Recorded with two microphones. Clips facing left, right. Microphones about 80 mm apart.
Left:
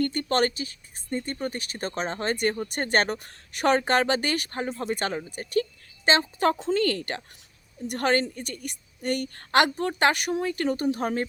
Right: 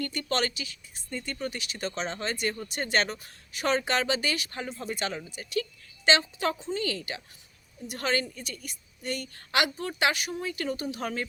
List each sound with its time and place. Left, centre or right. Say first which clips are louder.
0.0 s speech: left 6 dB; left
6.6 s a woman's voice: left 7 dB; left